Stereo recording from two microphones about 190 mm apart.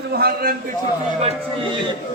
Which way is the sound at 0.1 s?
55° right (ahead or behind).